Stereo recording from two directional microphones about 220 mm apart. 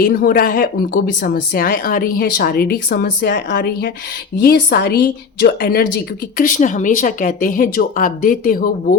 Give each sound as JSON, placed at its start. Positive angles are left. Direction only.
{"t": 0.0, "sound": "a woman's voice", "side_deg": 40}